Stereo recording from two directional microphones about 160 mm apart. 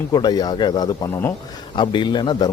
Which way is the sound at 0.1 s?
25° left (ahead or behind).